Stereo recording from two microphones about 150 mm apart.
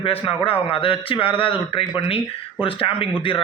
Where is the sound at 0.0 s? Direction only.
40° left (ahead or behind).